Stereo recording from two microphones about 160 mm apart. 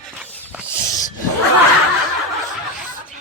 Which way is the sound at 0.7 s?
20° left (ahead or behind).